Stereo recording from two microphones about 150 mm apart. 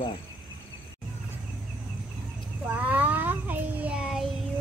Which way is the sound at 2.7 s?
10° right (ahead or behind).